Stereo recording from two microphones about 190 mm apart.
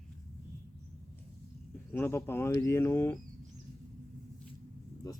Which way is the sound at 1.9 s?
10° left (ahead or behind).